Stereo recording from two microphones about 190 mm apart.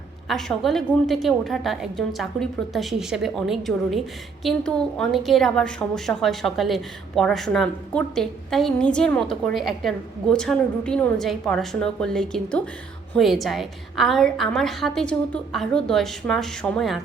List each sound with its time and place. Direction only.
0.3 s a woman's voice: centre (ahead or behind)